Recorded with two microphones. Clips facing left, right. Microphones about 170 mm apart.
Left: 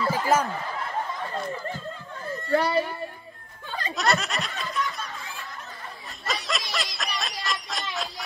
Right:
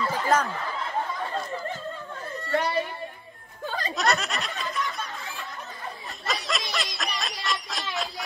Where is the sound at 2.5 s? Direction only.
35° left (ahead or behind).